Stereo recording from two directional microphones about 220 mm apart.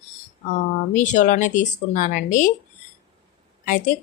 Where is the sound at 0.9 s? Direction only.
35° left (ahead or behind).